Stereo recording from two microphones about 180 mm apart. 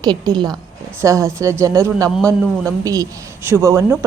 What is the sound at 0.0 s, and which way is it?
A woman's voice, 20° right (ahead or behind).